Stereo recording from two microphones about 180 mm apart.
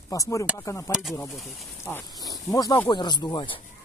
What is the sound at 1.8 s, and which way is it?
Speech, 15° left (ahead or behind).